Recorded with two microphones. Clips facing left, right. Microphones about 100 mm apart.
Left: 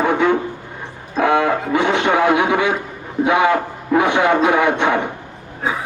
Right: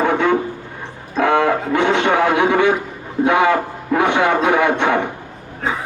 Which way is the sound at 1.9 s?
20° left (ahead or behind).